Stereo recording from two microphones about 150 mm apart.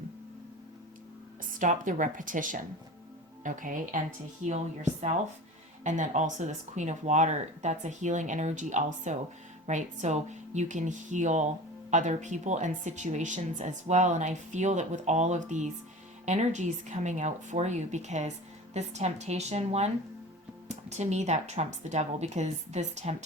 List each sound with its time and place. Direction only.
1.5 s speech: 60° right (ahead or behind)